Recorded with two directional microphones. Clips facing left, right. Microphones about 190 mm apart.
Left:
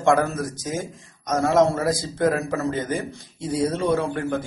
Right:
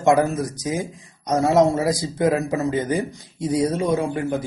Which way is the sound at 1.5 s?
20° right (ahead or behind).